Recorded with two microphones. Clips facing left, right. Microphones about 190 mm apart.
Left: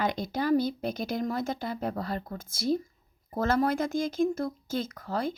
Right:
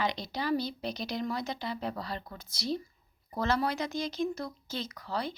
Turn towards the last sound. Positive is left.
turn(degrees=50)  # may be behind; listen again after turning